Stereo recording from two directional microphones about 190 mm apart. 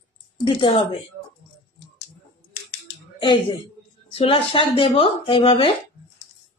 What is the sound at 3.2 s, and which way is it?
Speech, 25° left (ahead or behind).